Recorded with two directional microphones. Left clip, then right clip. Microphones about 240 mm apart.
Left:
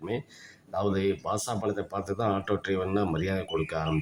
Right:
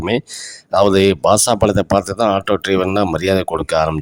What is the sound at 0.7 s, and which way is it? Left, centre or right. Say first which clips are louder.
Speech: right 16 dB; right.